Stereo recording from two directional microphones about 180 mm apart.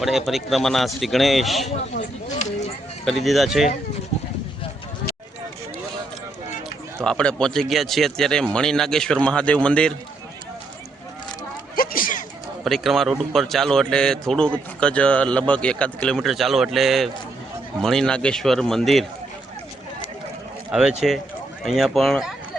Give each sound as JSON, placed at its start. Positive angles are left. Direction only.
{"t": 0.0, "sound": "speech", "side_deg": 0}
{"t": 2.0, "sound": "speech", "side_deg": 40}
{"t": 3.0, "sound": "speech", "side_deg": 0}
{"t": 7.0, "sound": "speech", "side_deg": 5}
{"t": 11.8, "sound": "a sound", "side_deg": 55}
{"t": 12.6, "sound": "speech", "side_deg": 0}
{"t": 20.7, "sound": "speech", "side_deg": -5}